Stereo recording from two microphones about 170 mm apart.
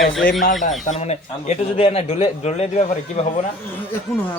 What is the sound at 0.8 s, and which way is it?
A man's voice, 40° left (ahead or behind).